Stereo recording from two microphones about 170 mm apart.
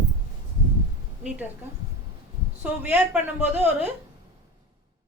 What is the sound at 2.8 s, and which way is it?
Speech, 10° right (ahead or behind).